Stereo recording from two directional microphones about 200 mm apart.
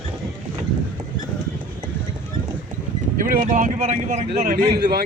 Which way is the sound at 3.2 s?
45° right (ahead or behind).